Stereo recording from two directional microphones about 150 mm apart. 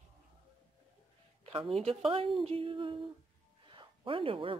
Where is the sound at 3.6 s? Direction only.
35° right (ahead or behind).